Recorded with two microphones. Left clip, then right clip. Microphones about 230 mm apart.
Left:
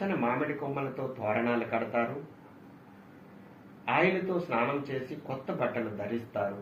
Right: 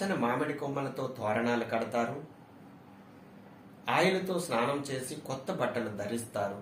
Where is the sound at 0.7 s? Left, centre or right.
Right.